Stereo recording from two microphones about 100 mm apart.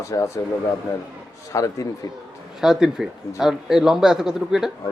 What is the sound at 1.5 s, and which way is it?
Speech, 35° left (ahead or behind).